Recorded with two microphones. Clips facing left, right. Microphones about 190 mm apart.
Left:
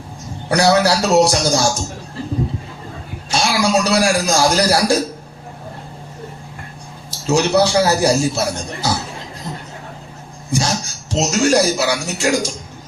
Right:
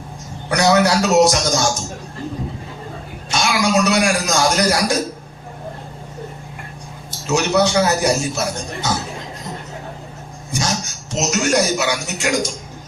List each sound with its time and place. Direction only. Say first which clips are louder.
0.4 s a man's voice: left 1 dB; 30° left (ahead or behind)
3.3 s a man's voice: left 1 dB; 30° left (ahead or behind)
7.3 s a man's voice: left 2 dB; 30° left (ahead or behind)
10.5 s speech: left 3 dB; 30° left (ahead or behind)